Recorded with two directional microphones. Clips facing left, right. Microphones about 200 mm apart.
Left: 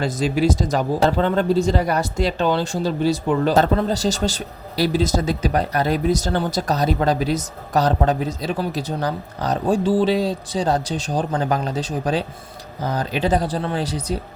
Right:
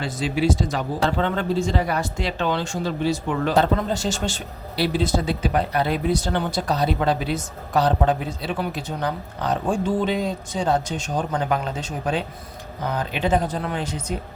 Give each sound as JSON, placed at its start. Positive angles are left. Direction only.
{"t": 0.0, "sound": "speech", "side_deg": 45}